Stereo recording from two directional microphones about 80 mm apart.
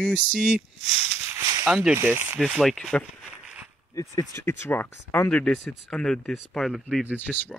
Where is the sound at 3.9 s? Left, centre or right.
Left.